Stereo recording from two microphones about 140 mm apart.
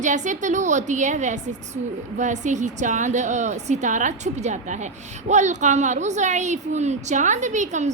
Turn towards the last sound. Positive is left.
turn(degrees=-60)  # may be behind; listen again after turning